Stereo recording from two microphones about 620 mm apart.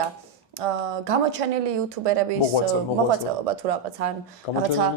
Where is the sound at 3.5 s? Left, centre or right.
Right.